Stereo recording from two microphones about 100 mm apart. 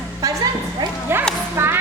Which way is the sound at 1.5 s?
25° right (ahead or behind).